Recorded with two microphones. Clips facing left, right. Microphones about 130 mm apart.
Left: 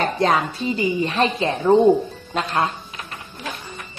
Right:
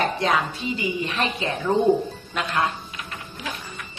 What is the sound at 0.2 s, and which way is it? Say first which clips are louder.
A woman's voice: left 4 dB; 40° left (ahead or behind).